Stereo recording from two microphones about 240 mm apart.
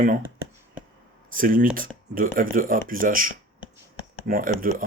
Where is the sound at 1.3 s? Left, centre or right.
Right.